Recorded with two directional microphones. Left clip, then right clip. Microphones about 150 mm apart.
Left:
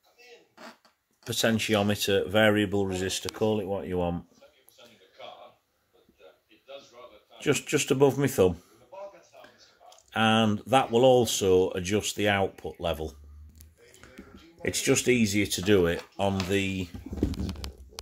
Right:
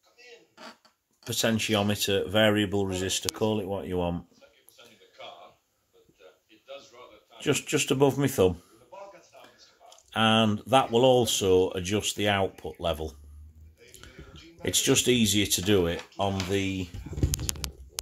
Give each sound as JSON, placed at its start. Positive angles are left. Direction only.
{"t": 1.2, "sound": "speech", "side_deg": 15}
{"t": 7.3, "sound": "speech", "side_deg": 10}
{"t": 9.8, "sound": "speech", "side_deg": 15}
{"t": 14.6, "sound": "speech", "side_deg": 5}